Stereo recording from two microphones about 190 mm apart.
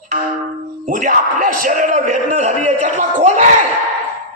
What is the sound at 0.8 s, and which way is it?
A man's voice, 45° right (ahead or behind).